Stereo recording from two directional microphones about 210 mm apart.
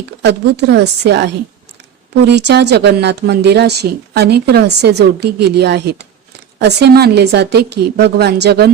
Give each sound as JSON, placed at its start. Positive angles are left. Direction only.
{"t": 0.2, "sound": "speech", "side_deg": -55}